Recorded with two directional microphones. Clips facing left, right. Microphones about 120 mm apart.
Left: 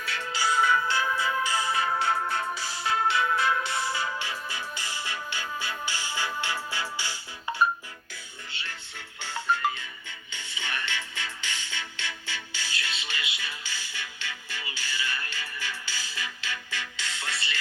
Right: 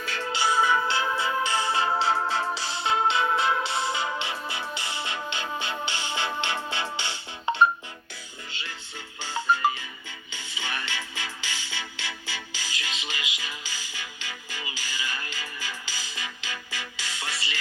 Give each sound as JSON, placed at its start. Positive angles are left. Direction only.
{"t": 0.0, "sound": "music", "side_deg": -35}
{"t": 0.3, "sound": "music", "side_deg": -20}
{"t": 9.2, "sound": "music", "side_deg": -15}